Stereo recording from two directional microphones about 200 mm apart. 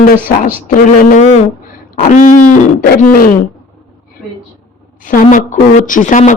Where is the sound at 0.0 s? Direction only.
45° left (ahead or behind).